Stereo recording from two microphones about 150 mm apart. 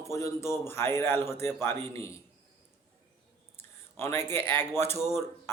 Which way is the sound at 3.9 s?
15° left (ahead or behind).